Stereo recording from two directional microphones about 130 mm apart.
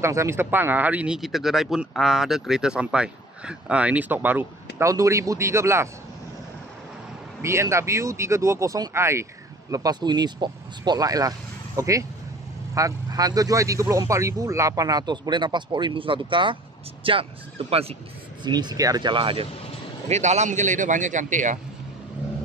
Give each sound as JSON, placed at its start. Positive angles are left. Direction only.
{"t": 0.0, "sound": "speech", "side_deg": -20}
{"t": 7.4, "sound": "speech", "side_deg": -20}
{"t": 18.4, "sound": "speech", "side_deg": -35}
{"t": 20.1, "sound": "a man's voice", "side_deg": -60}